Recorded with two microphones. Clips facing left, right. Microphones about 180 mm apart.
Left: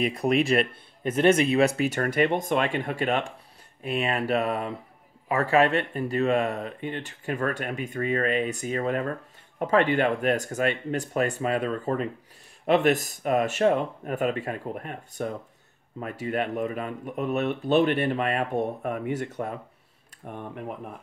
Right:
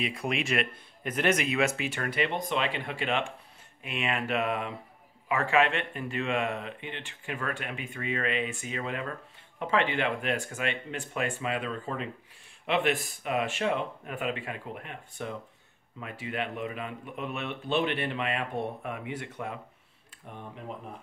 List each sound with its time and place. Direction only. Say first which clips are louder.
0.0 s speech: left 8 dB; 40° left (ahead or behind)
20.2 s speech: left 6 dB; 55° left (ahead or behind)